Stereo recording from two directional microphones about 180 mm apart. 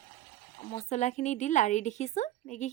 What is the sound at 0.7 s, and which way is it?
Speech, 40° left (ahead or behind).